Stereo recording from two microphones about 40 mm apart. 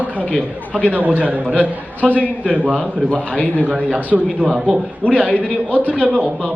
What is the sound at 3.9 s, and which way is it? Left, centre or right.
Speech, right.